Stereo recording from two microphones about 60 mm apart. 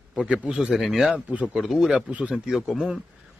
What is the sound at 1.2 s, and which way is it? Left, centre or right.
Speech, right.